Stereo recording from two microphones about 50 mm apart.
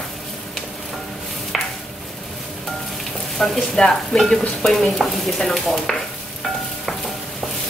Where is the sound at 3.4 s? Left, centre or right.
Centre.